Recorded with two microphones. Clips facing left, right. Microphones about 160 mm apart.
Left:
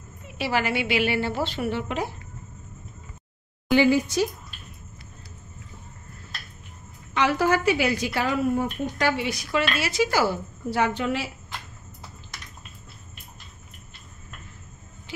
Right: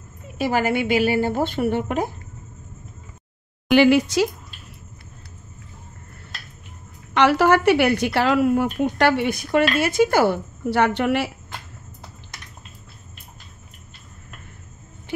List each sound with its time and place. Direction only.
0.4 s a woman's voice: 45° right (ahead or behind)
3.7 s a woman's voice: 80° right
7.2 s a woman's voice: 70° right (ahead or behind)